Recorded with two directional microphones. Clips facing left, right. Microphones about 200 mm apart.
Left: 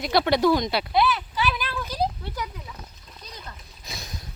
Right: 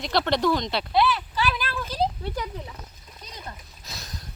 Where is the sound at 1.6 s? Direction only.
15° left (ahead or behind).